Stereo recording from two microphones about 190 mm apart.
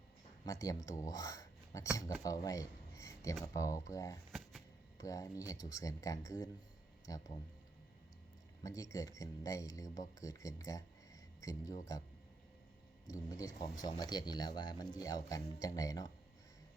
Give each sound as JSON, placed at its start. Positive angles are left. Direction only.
{"t": 0.4, "sound": "speech", "side_deg": 20}
{"t": 4.3, "sound": "a sound", "side_deg": 0}
{"t": 4.9, "sound": "speech", "side_deg": 20}
{"t": 8.6, "sound": "speech", "side_deg": 15}
{"t": 13.1, "sound": "speech", "side_deg": 15}